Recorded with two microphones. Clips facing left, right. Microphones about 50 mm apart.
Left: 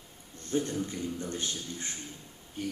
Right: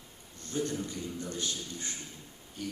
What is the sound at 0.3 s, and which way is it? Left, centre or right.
A man's voice, left.